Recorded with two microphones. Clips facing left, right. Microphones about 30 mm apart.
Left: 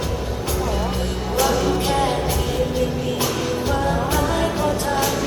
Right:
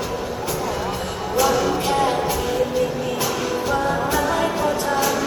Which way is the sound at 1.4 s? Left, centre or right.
Centre.